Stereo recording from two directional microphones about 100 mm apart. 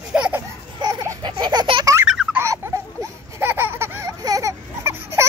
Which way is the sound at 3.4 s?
25° right (ahead or behind).